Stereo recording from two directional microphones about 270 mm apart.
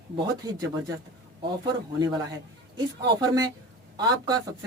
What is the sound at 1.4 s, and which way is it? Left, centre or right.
Speech, centre.